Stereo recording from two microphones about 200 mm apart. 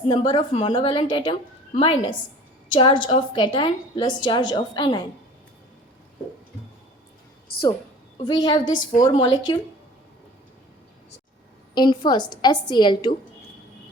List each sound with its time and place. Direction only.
0.1 s a woman's voice: 25° left (ahead or behind)
8.2 s a woman's voice: 20° left (ahead or behind)
8.9 s a woman's voice: 35° left (ahead or behind)
9.2 s a woman's voice: 20° left (ahead or behind)
11.7 s a woman's voice: 20° left (ahead or behind)